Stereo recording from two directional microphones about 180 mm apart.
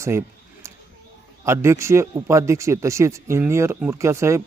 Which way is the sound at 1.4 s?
15° right (ahead or behind).